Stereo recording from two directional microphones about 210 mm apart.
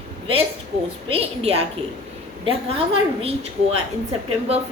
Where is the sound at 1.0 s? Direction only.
25° right (ahead or behind).